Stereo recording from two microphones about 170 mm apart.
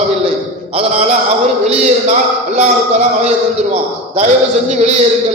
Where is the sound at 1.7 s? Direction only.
40° right (ahead or behind).